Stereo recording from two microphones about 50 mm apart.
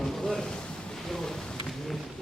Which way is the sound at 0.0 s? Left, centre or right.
Centre.